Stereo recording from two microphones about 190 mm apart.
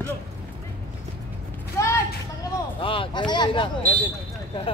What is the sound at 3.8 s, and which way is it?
Speech, 10° left (ahead or behind).